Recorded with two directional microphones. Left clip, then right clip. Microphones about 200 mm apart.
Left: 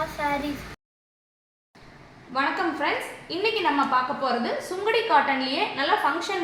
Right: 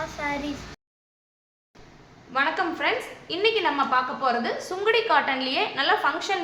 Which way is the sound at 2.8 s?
15° right (ahead or behind).